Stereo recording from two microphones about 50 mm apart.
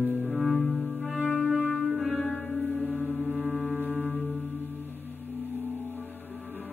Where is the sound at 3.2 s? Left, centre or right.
Right.